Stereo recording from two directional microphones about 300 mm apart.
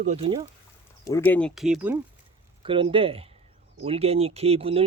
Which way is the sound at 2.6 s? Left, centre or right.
Centre.